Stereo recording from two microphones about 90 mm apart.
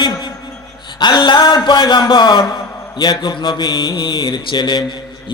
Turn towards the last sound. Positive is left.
turn(degrees=55)  # may be behind; listen again after turning